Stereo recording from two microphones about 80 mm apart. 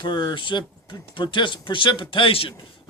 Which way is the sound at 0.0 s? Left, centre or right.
Left.